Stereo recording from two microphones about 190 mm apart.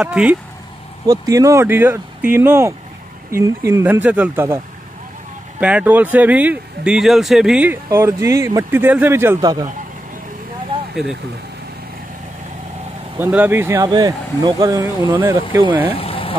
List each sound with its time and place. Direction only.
0.0 s speech: 5° right (ahead or behind)
1.0 s speech: 20° right (ahead or behind)
5.6 s speech: 5° right (ahead or behind)
10.7 s vehicle: 25° right (ahead or behind)
13.2 s speech: 10° right (ahead or behind)
15.9 s vehicle: 30° left (ahead or behind)